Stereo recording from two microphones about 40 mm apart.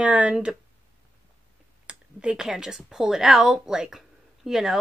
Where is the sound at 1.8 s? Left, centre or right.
Right.